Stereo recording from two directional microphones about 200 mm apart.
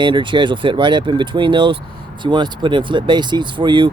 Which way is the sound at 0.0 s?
25° right (ahead or behind).